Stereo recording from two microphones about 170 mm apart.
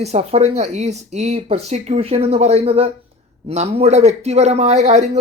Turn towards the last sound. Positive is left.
turn(degrees=-40)  # may be behind; listen again after turning